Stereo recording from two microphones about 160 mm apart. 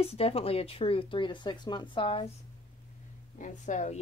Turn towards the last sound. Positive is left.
turn(degrees=50)  # may be behind; listen again after turning